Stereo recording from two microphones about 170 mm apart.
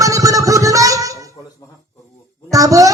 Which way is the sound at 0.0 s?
20° right (ahead or behind).